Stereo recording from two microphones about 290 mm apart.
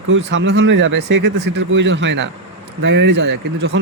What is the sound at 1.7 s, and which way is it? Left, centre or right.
Speech, right.